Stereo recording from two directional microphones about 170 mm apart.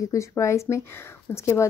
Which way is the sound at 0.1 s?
15° left (ahead or behind).